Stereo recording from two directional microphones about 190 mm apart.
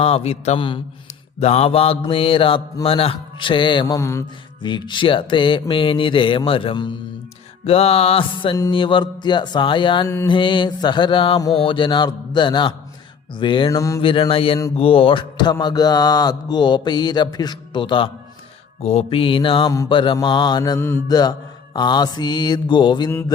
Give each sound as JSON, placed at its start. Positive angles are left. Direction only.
{"t": 0.0, "sound": "mantra", "side_deg": 30}